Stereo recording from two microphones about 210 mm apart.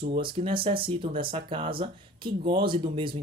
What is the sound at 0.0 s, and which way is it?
Speech, 25° right (ahead or behind).